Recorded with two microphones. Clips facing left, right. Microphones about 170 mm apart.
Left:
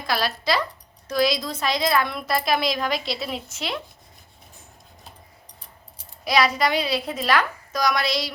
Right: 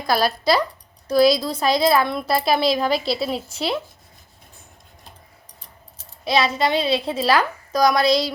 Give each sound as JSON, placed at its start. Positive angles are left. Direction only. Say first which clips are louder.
{"t": 0.1, "sound": "a woman's voice", "louder": "right 5 dB", "side_deg": -40}
{"t": 6.2, "sound": "a child's voice", "louder": "right 1 dB", "side_deg": -25}